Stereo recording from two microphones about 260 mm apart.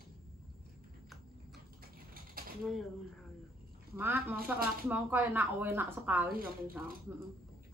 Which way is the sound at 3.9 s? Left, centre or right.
Centre.